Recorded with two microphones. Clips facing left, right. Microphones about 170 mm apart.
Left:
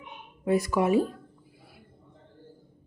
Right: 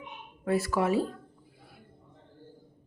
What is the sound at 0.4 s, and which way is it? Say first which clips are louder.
Speech: left 3 dB; 15° left (ahead or behind).